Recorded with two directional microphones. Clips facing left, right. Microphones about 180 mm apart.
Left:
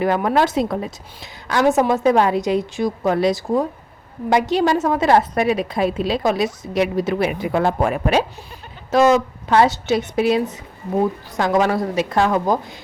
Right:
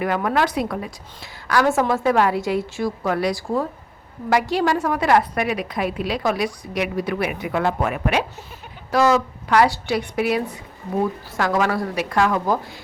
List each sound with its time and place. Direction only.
0.0 s a woman's voice: 30° left (ahead or behind)
8.9 s a woman's voice: 20° left (ahead or behind)